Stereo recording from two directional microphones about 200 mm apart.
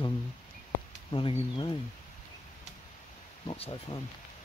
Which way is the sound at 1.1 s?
25° left (ahead or behind).